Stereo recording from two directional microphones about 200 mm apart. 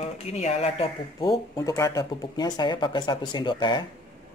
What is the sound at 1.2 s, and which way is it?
Speech, 20° left (ahead or behind).